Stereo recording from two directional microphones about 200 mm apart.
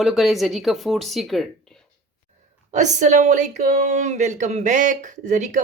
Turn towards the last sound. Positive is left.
turn(degrees=-35)  # may be behind; listen again after turning